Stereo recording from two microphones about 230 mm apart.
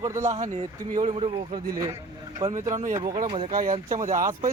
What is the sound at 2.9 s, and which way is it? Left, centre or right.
Speech, centre.